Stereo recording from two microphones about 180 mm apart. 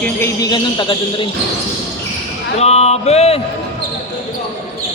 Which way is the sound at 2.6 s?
35° left (ahead or behind).